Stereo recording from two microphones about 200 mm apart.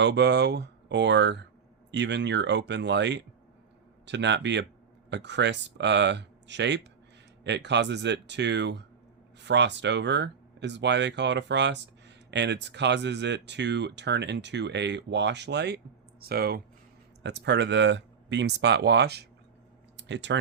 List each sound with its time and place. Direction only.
0.0 s speech: 60° right (ahead or behind)
17.2 s speech: 60° right (ahead or behind)